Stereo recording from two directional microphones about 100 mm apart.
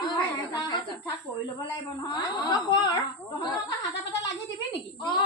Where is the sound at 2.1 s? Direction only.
45° left (ahead or behind).